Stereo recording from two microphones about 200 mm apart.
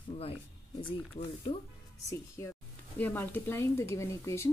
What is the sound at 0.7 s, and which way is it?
Speech, 25° left (ahead or behind).